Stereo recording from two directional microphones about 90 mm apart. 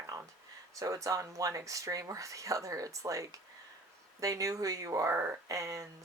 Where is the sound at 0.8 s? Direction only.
35° right (ahead or behind).